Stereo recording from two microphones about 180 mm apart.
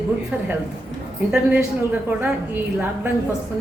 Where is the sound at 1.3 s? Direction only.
10° right (ahead or behind).